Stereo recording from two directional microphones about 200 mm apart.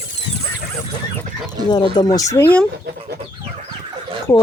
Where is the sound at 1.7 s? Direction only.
20° left (ahead or behind).